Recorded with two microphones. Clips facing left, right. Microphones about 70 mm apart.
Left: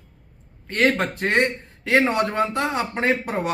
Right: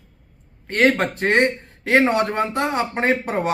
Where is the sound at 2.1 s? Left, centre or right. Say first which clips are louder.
Right 1 dB; right.